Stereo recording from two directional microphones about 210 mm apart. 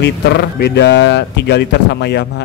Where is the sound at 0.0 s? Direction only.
55° left (ahead or behind).